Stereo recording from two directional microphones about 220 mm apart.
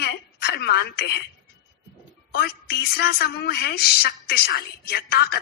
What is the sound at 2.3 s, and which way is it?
Speech, 45° left (ahead or behind).